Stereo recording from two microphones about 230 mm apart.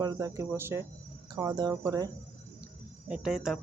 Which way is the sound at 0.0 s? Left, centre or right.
Centre.